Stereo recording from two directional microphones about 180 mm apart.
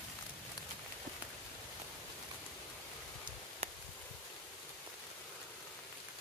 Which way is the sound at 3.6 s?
35° right (ahead or behind).